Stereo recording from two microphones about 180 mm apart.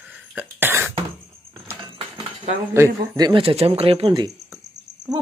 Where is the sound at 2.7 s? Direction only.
20° right (ahead or behind).